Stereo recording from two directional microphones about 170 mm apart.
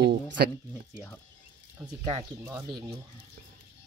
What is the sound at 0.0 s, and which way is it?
Speech, 75° right (ahead or behind).